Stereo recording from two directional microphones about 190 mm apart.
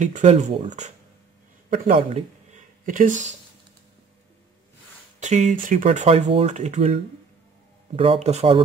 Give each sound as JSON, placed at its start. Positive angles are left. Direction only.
{"t": 0.0, "sound": "speech", "side_deg": -40}
{"t": 2.1, "sound": "a sound", "side_deg": -40}
{"t": 5.2, "sound": "speech", "side_deg": -40}
{"t": 5.9, "sound": "speech", "side_deg": -35}